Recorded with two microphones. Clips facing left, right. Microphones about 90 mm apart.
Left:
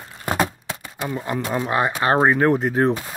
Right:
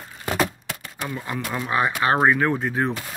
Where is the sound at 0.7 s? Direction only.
25° left (ahead or behind).